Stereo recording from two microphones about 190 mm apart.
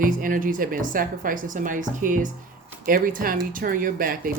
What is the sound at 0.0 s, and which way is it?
Speech, 45° right (ahead or behind).